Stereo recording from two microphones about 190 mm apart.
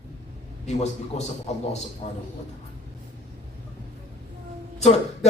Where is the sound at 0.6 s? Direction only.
35° left (ahead or behind).